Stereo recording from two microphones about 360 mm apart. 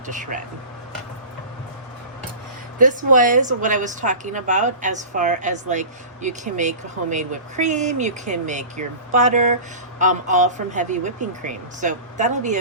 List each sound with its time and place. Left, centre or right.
0.1 s a woman's voice: right
2.7 s a woman's voice: right